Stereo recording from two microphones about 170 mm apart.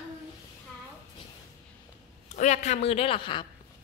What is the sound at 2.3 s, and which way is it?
A woman's voice, 45° left (ahead or behind).